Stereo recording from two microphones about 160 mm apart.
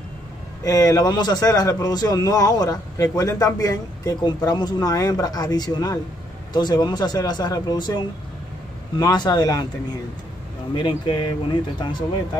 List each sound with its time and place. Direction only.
0.7 s a man's voice: 25° left (ahead or behind)
10.8 s a man's voice: 30° left (ahead or behind)